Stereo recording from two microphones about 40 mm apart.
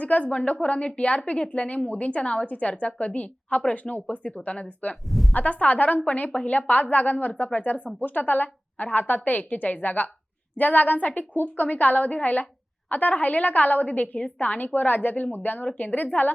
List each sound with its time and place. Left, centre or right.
0.0 s a woman's voice: left
4.5 s a woman's voice: left
5.0 s a woman's voice: centre
5.3 s a woman's voice: left